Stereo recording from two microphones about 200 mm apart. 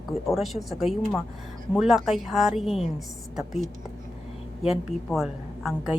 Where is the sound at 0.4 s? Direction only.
Centre (ahead or behind).